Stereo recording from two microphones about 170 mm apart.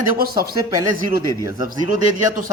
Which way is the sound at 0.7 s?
20° right (ahead or behind).